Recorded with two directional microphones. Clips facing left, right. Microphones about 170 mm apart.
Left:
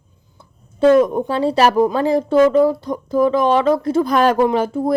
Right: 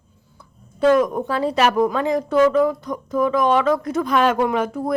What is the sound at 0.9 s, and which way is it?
Speech, 25° left (ahead or behind).